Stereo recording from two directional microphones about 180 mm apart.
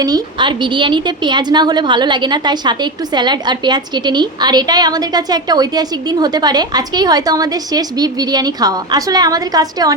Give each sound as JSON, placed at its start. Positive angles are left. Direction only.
{"t": 0.0, "sound": "a woman's voice", "side_deg": -25}